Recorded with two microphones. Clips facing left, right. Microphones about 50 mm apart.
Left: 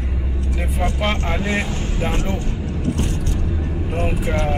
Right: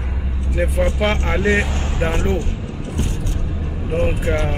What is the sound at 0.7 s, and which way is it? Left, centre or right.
Male singing, centre.